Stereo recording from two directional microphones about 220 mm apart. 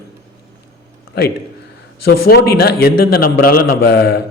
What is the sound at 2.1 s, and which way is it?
A man's voice, 45° left (ahead or behind).